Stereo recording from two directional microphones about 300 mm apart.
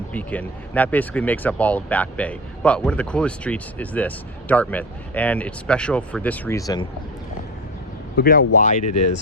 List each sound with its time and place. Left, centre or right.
0.1 s speech: centre
8.1 s speech: left